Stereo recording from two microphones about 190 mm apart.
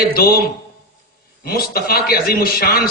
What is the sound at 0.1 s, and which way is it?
Speech, 50° left (ahead or behind).